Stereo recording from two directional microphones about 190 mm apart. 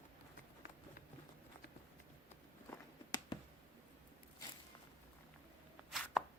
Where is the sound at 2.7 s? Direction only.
20° left (ahead or behind).